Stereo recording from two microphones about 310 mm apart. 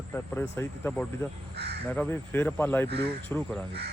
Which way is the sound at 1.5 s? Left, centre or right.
Right.